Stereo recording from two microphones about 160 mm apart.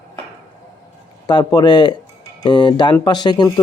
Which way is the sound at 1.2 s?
25° left (ahead or behind).